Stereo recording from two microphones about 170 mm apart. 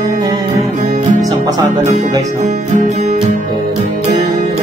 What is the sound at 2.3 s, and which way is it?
Music, 45° right (ahead or behind).